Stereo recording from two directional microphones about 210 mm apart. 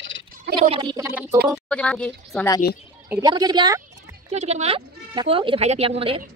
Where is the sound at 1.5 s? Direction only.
5° left (ahead or behind).